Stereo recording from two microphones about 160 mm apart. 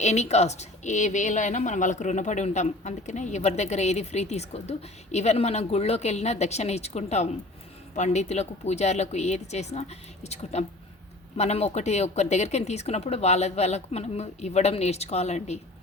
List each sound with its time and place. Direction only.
0.0 s speech: 45° left (ahead or behind)